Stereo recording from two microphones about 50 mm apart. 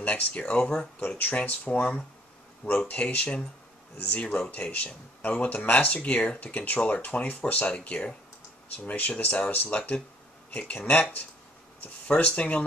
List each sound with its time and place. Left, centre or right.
0.0 s speech: left
1.0 s speech: left